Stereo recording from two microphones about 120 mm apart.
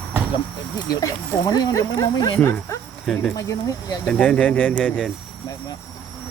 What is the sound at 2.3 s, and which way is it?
Speech, 20° left (ahead or behind).